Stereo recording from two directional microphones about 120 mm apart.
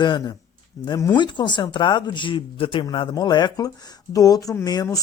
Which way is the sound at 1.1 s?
40° left (ahead or behind).